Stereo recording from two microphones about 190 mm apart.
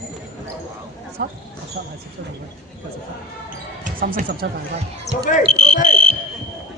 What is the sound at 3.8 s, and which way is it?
Speech, 45° right (ahead or behind).